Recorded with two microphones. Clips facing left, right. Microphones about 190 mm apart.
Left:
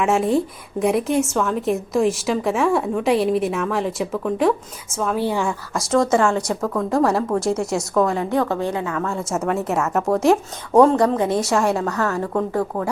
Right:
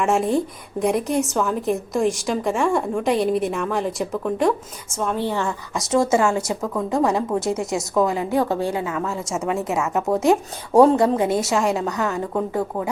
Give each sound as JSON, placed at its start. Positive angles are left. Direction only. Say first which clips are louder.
{"t": 0.0, "sound": "a woman's voice", "louder": "left 1 dB", "side_deg": 0}
{"t": 6.0, "sound": "a woman's voice", "louder": "left 1 dB", "side_deg": -25}
{"t": 6.2, "sound": "a woman's voice", "louder": "left 1 dB", "side_deg": -10}
{"t": 8.7, "sound": "a woman's voice", "louder": "even", "side_deg": -20}
{"t": 9.0, "sound": "a woman's voice", "louder": "left 2 dB", "side_deg": 0}
{"t": 10.8, "sound": "a woman's voice", "louder": "even", "side_deg": -25}
{"t": 11.4, "sound": "a woman's voice", "louder": "left 1 dB", "side_deg": 0}
{"t": 11.8, "sound": "a woman's voice", "louder": "left 1 dB", "side_deg": -20}